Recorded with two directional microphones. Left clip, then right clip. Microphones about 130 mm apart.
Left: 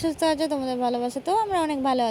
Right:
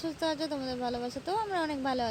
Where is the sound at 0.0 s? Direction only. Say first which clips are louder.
Left 9 dB; 60° left (ahead or behind).